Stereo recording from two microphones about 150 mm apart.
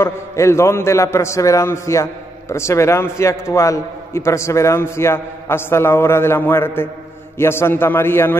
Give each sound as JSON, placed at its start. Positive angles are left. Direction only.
{"t": 0.0, "sound": "a man's voice", "side_deg": 20}